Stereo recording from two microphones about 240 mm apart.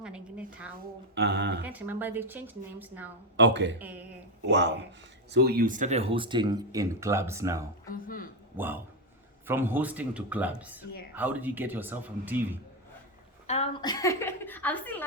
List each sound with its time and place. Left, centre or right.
0.0 s a sound: centre
1.1 s speech: right
1.7 s speech: centre
3.3 s speech: right
3.8 s speech: centre
4.4 s speech: right; by 7.6 s centre
7.9 s a man's voice: left
8.5 s speech: centre
13.5 s a woman's voice: left